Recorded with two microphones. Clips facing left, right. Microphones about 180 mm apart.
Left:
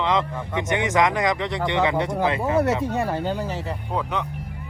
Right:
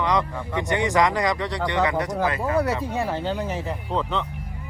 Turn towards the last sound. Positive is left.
turn(degrees=10)  # may be behind; listen again after turning